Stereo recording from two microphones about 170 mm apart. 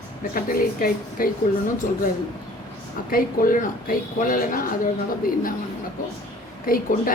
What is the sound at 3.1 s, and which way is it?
Speech, 55° left (ahead or behind).